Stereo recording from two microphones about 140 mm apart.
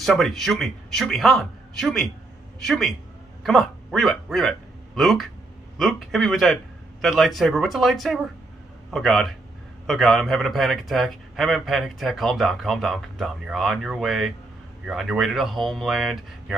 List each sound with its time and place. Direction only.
0.0 s speech: centre (ahead or behind)